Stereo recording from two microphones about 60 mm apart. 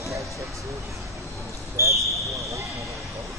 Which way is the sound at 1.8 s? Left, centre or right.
Right.